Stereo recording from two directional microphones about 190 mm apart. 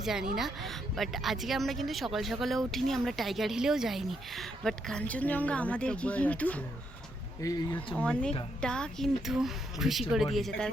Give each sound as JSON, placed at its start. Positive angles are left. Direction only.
{"t": 0.0, "sound": "speech", "side_deg": 0}
{"t": 8.0, "sound": "speech", "side_deg": 5}